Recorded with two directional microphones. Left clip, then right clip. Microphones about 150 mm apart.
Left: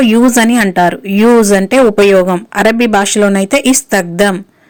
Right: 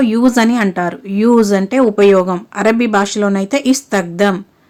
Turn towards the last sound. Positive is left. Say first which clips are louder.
# left 3 dB
turn(degrees=20)  # may be behind; listen again after turning